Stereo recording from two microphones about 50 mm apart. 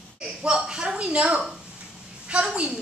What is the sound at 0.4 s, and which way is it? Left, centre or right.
A woman's voice, centre.